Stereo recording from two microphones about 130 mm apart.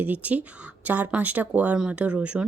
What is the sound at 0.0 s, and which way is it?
Speech, 10° right (ahead or behind).